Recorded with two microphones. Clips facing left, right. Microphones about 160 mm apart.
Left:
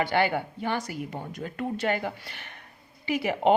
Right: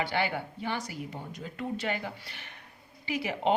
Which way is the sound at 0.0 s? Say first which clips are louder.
Left 5 dB; 55° left (ahead or behind).